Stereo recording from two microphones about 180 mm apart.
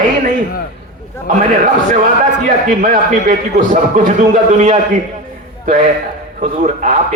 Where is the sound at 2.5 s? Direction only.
50° right (ahead or behind).